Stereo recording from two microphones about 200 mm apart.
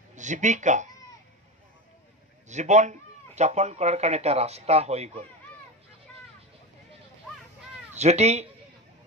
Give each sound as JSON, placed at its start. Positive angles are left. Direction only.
{"t": 0.1, "sound": "speech", "side_deg": -35}
{"t": 2.4, "sound": "speech", "side_deg": -35}
{"t": 7.9, "sound": "speech", "side_deg": -35}